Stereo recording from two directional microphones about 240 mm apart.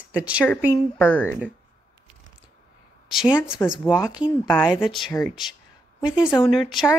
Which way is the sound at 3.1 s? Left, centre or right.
Centre.